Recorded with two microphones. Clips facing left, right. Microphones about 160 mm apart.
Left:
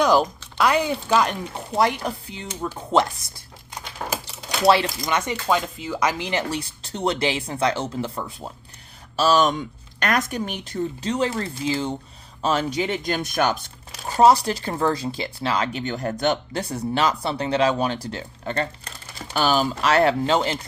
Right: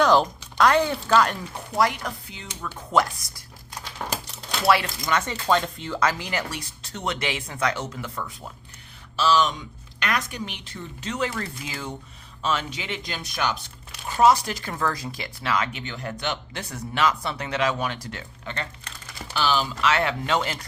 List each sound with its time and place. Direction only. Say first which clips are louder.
0.0 s speech: left 1 dB; 10° left (ahead or behind); by 3.4 s 25° left (ahead or behind)
3.9 s a sound: left 2 dB; 10° left (ahead or behind)
5.0 s speech: left 1 dB; 15° left (ahead or behind)
9.1 s speech: left 3 dB; 45° left (ahead or behind); by 11.9 s 30° left (ahead or behind)
12.4 s speech: left 6 dB; 40° left (ahead or behind)
14.1 s speech: left 3 dB; 35° left (ahead or behind)